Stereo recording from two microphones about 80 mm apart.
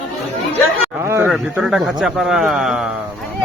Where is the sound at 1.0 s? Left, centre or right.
Right.